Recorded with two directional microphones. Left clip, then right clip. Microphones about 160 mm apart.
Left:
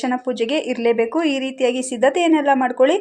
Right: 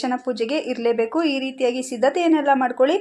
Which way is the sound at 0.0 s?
20° left (ahead or behind).